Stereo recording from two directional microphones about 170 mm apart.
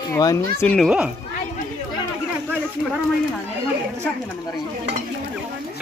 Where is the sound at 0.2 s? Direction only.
20° left (ahead or behind).